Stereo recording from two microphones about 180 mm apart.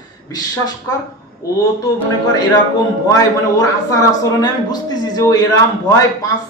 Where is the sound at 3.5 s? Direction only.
20° left (ahead or behind).